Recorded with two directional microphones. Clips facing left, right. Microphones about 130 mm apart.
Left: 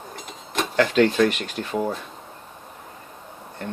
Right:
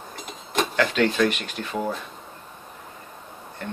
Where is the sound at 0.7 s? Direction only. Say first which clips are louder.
Left 4 dB; 35° left (ahead or behind).